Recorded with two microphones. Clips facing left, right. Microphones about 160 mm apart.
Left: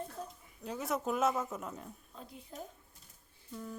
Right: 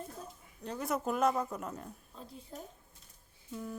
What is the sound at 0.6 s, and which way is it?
Speech, 5° left (ahead or behind).